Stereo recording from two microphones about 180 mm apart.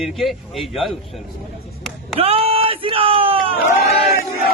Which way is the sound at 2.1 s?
35° right (ahead or behind).